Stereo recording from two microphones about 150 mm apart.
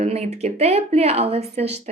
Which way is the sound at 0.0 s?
45° right (ahead or behind).